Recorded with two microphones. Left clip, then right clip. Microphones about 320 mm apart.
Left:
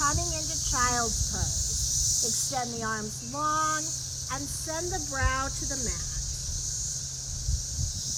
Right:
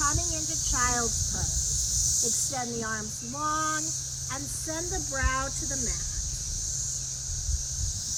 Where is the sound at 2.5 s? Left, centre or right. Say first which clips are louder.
Left 1 dB; centre.